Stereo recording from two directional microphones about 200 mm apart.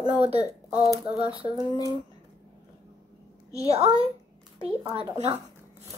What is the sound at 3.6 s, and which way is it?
Speech, 30° right (ahead or behind).